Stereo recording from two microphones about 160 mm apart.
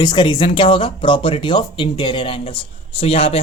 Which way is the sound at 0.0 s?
30° left (ahead or behind).